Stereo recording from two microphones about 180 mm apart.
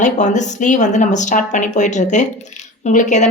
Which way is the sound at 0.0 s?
40° left (ahead or behind).